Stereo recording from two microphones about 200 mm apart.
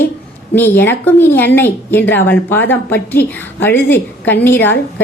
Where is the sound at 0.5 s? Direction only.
10° left (ahead or behind).